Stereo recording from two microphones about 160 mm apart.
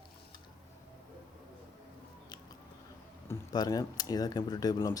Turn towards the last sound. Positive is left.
turn(degrees=20)  # may be behind; listen again after turning